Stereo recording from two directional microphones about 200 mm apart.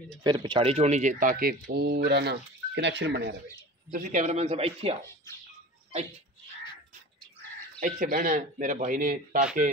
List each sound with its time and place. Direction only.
0.2 s speech: 20° right (ahead or behind); by 3.3 s 60° right (ahead or behind)
3.9 s speech: 40° right (ahead or behind)
7.8 s speech: 40° right (ahead or behind)